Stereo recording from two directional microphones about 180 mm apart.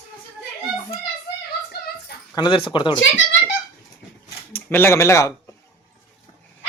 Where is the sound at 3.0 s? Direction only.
90° left.